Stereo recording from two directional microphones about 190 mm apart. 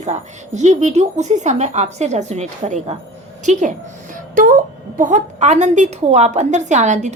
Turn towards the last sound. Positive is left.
turn(degrees=-40)  # may be behind; listen again after turning